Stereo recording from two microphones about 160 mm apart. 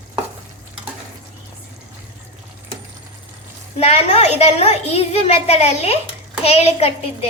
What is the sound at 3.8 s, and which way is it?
A child's voice, 40° left (ahead or behind).